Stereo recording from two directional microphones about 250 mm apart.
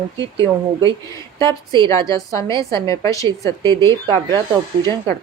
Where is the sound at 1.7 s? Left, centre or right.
Centre.